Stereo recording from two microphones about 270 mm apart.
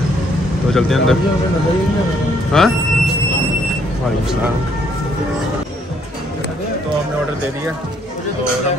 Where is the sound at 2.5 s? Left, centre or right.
Centre.